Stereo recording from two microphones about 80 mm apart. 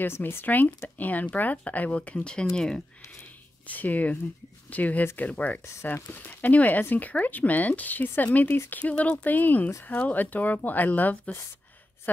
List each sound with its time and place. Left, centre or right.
0.0 s speech: left; by 2.8 s centre
3.6 s speech: centre